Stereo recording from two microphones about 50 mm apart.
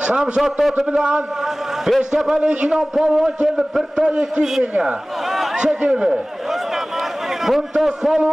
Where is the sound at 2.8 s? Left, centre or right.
Centre.